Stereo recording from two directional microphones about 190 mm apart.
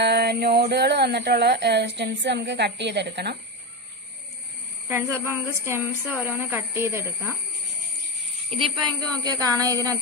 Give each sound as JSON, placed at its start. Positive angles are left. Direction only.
{"t": 0.0, "sound": "speech", "side_deg": -60}
{"t": 4.8, "sound": "speech", "side_deg": -15}
{"t": 8.5, "sound": "a woman's voice", "side_deg": -30}